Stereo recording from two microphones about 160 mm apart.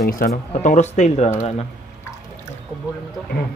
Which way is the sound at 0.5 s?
50° left (ahead or behind).